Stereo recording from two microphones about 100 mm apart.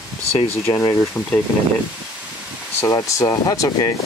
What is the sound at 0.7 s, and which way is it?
Speech, 45° left (ahead or behind).